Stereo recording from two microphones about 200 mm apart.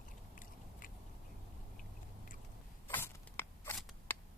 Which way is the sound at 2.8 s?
10° left (ahead or behind).